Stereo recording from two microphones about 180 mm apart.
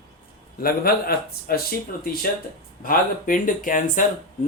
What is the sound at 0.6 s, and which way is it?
Speech, 55° left (ahead or behind).